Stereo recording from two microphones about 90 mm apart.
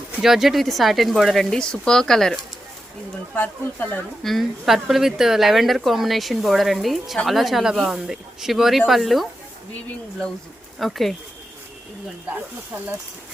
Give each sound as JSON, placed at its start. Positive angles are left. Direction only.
{"t": 0.2, "sound": "speech", "side_deg": -5}
{"t": 3.3, "sound": "speech", "side_deg": 15}
{"t": 4.2, "sound": "speech", "side_deg": 0}
{"t": 10.8, "sound": "speech", "side_deg": 0}